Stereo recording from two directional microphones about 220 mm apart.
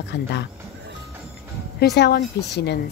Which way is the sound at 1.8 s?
50° left (ahead or behind).